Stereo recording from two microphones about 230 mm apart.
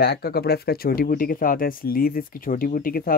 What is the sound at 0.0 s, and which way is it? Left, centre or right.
Speech, left.